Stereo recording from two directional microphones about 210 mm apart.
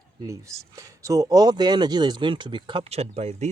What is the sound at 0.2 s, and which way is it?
Speech, 15° right (ahead or behind).